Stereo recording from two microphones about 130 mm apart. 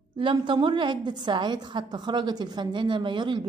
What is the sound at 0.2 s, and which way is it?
A woman's voice, 40° right (ahead or behind).